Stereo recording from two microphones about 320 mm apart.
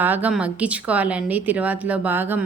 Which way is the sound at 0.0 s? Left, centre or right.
Centre.